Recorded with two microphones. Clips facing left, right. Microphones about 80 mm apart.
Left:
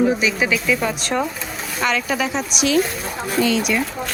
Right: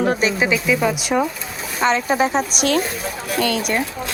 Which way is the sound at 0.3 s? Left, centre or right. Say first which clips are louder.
Right 1 dB; centre.